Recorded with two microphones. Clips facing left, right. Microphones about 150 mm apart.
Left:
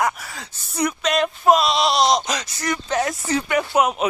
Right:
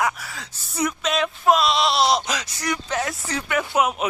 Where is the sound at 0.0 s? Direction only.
Centre (ahead or behind).